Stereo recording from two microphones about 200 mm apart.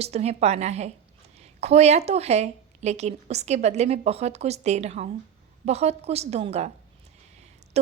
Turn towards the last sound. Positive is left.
turn(degrees=-35)  # may be behind; listen again after turning